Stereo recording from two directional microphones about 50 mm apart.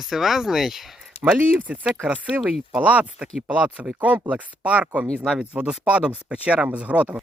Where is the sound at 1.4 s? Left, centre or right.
Right.